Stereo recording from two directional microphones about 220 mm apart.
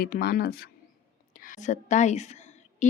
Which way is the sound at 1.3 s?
40° left (ahead or behind).